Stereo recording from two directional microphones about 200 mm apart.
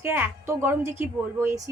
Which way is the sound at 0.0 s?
10° right (ahead or behind).